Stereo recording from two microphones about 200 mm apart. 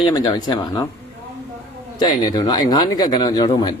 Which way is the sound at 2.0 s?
20° left (ahead or behind).